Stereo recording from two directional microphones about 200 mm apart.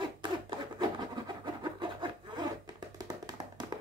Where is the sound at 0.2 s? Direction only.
20° right (ahead or behind).